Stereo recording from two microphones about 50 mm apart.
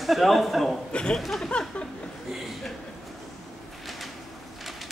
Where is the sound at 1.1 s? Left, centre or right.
Centre.